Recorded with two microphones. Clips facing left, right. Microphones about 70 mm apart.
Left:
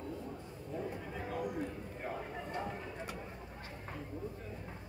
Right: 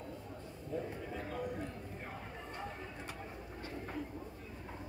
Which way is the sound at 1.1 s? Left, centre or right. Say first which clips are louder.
Left 1 dB; centre.